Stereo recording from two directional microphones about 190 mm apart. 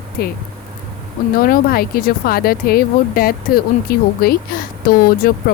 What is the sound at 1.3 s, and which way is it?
Speech, 50° left (ahead or behind).